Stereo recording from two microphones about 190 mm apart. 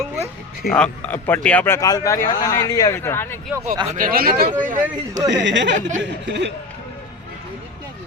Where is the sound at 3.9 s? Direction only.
45° right (ahead or behind).